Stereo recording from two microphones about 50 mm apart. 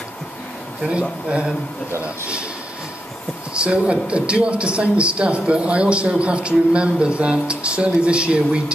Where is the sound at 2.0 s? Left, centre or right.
Right.